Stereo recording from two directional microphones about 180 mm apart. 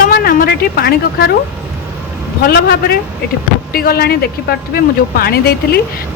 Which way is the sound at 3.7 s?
55° left (ahead or behind).